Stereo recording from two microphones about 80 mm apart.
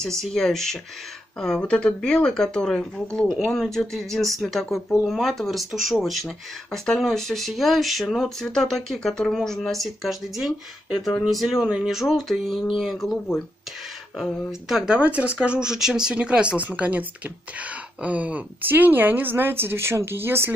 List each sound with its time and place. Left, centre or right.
0.0 s speech: centre
14.7 s speech: centre; by 20.5 s right